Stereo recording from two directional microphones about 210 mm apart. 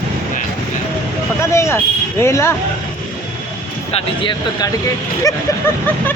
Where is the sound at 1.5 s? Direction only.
15° left (ahead or behind).